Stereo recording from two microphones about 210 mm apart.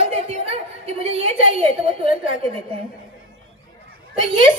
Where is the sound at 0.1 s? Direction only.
30° right (ahead or behind).